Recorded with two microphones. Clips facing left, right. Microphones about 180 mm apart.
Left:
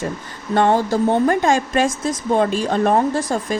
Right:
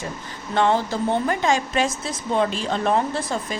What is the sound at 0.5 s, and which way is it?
Speech, 50° left (ahead or behind).